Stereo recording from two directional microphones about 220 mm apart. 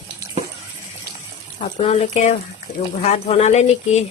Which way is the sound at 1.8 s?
30° left (ahead or behind).